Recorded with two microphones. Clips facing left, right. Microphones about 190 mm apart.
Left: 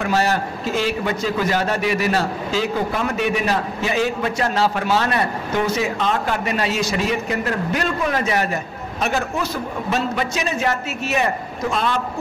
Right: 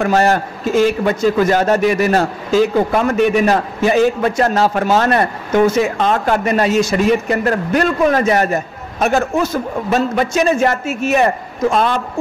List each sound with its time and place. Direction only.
0.0 s a man's voice: 50° right (ahead or behind)